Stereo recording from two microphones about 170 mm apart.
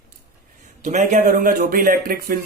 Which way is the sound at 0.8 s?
45° right (ahead or behind).